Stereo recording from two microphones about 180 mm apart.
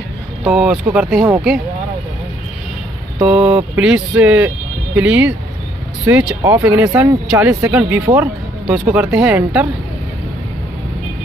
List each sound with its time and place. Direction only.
0.5 s speech: 10° right (ahead or behind)
3.3 s speech: 10° right (ahead or behind)